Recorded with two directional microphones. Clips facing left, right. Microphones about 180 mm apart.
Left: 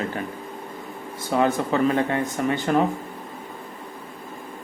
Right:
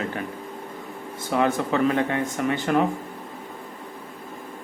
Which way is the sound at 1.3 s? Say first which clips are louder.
Left 1 dB; 35° left (ahead or behind).